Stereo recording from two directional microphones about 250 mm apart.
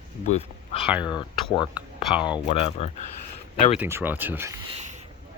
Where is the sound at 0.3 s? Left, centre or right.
Left.